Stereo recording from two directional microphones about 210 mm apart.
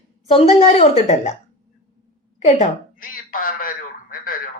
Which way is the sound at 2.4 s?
40° left (ahead or behind).